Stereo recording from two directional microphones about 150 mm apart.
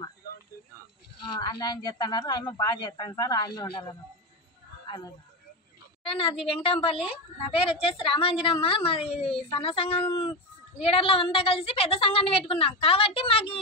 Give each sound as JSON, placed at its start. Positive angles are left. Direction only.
{"t": 1.3, "sound": "speech", "side_deg": 30}
{"t": 6.0, "sound": "a woman's voice", "side_deg": 40}